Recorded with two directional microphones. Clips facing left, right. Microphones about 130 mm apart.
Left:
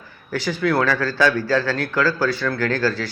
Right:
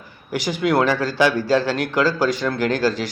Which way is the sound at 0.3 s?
15° right (ahead or behind).